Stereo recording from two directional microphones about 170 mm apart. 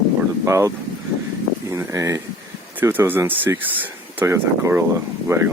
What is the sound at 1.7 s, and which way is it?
Speech, 20° right (ahead or behind).